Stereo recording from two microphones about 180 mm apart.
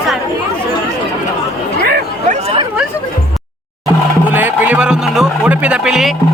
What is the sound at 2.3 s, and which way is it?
Chatter, 35° right (ahead or behind).